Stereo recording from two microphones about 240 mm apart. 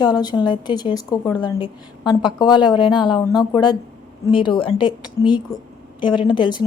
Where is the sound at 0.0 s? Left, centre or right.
Centre.